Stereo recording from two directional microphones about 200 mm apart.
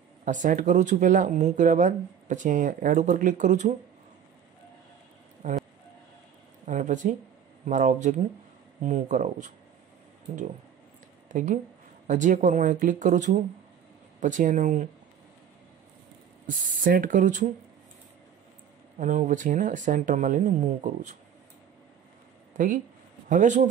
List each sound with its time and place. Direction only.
0.2 s speech: 40° right (ahead or behind)
5.4 s speech: 40° right (ahead or behind)
6.6 s speech: 40° right (ahead or behind)
11.2 s speech: 40° right (ahead or behind)
16.4 s speech: 40° right (ahead or behind)
18.9 s speech: 40° right (ahead or behind)
23.2 s speech: 40° right (ahead or behind)